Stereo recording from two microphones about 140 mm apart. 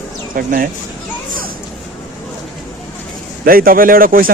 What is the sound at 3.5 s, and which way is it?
Speech, 90° right.